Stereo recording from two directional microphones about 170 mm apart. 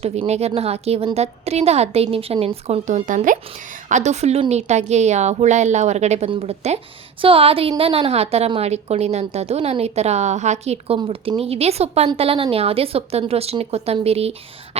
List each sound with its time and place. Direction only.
0.0 s a woman's voice: 40° right (ahead or behind)